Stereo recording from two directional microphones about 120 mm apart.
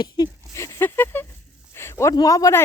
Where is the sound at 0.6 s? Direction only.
20° left (ahead or behind).